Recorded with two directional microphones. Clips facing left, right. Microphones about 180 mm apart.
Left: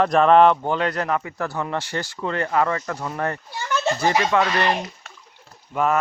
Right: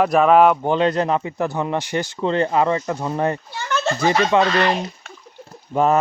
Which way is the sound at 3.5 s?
15° left (ahead or behind).